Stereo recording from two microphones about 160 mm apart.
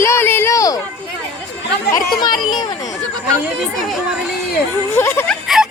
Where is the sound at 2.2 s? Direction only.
25° left (ahead or behind).